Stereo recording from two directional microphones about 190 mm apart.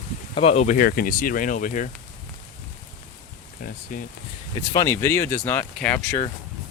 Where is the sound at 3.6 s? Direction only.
45° left (ahead or behind).